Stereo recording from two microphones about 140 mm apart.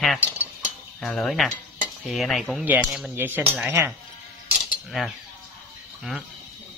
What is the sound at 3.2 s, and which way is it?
Speech, 15° right (ahead or behind).